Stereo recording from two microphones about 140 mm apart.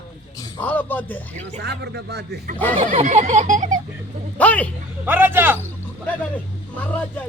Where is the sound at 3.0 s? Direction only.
55° right (ahead or behind).